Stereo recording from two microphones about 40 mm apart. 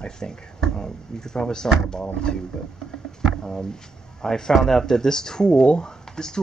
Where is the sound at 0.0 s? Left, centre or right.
Centre.